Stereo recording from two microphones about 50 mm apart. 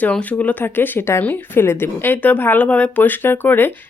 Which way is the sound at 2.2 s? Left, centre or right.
Left.